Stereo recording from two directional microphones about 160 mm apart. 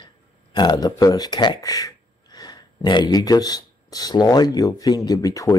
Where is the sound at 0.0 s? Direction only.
25° left (ahead or behind).